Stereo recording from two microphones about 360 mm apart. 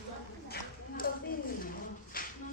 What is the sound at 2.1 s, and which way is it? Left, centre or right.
Music, left.